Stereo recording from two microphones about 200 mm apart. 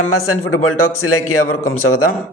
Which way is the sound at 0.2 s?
90° left.